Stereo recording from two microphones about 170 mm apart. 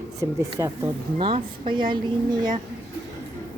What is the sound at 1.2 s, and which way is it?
Speech, 30° right (ahead or behind).